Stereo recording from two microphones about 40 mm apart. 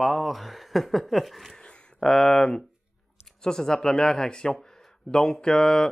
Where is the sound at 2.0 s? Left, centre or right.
Centre.